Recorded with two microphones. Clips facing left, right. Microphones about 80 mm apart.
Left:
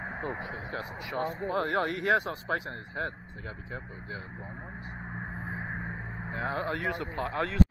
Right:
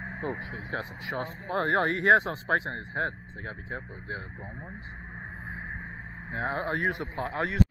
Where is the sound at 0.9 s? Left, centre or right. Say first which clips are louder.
Left 2 dB; right.